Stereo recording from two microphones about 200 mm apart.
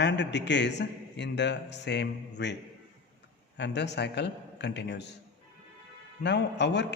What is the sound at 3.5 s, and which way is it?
A man's voice, 60° left (ahead or behind).